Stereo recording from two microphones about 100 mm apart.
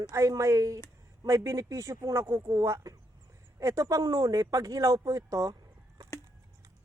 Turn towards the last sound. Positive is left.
turn(degrees=-35)  # may be behind; listen again after turning